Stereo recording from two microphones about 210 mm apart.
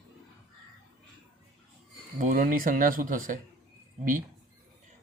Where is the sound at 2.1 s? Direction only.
40° right (ahead or behind).